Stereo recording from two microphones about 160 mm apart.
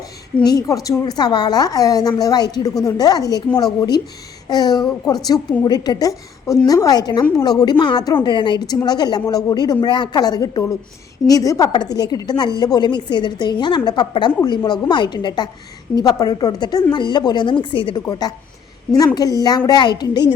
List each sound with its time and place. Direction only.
0.4 s a woman's voice: 20° left (ahead or behind)